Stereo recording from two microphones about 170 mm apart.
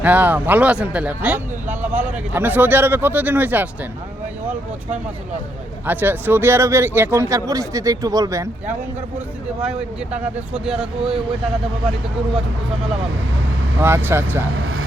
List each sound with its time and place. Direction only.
0.0 s speech: 10° right (ahead or behind)
5.8 s speech: 10° right (ahead or behind)
10.5 s speech: 5° right (ahead or behind)
13.8 s speech: 15° right (ahead or behind)